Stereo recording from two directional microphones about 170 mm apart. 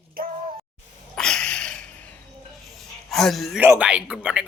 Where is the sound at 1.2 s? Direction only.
5° left (ahead or behind).